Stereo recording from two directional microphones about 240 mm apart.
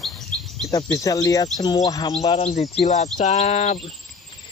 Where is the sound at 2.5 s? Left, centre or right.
Left.